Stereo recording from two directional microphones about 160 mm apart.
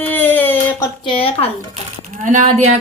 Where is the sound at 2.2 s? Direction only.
45° right (ahead or behind).